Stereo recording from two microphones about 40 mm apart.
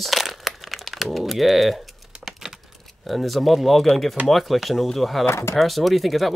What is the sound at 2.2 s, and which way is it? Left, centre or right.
Typing, centre.